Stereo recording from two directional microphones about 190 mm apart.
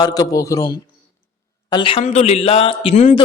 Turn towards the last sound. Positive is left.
turn(degrees=40)  # may be behind; listen again after turning